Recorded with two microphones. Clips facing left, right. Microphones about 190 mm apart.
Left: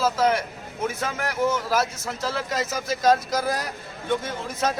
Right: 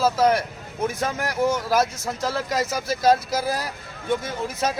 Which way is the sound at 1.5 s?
15° right (ahead or behind).